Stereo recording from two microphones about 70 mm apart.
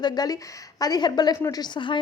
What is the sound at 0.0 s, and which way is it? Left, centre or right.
A woman's voice, left.